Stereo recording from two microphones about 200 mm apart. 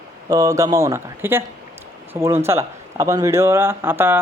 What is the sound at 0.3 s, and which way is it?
A woman's voice, 15° right (ahead or behind).